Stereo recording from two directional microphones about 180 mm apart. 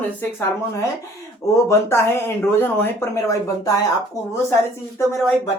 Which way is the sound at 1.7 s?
15° left (ahead or behind).